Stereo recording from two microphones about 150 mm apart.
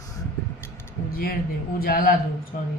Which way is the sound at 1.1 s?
75° left (ahead or behind).